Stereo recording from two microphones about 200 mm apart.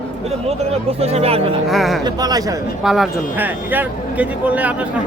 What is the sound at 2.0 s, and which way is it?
Speech, 20° right (ahead or behind).